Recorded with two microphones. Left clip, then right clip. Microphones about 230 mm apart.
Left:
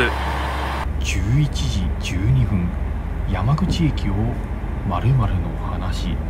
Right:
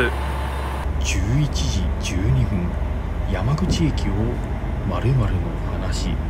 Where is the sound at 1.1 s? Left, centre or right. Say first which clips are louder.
Right 1 dB; centre.